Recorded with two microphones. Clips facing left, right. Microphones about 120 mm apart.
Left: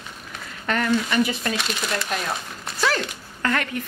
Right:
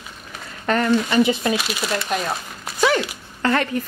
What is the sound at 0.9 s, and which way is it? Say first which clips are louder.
Speech: right 4 dB; 25° right (ahead or behind).